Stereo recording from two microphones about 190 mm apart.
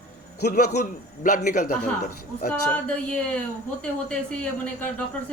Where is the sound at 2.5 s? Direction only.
5° left (ahead or behind).